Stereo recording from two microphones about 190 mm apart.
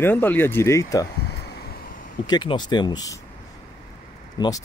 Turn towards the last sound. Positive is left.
turn(degrees=20)  # may be behind; listen again after turning